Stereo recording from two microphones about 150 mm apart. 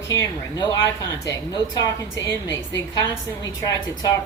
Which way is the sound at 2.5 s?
20° left (ahead or behind).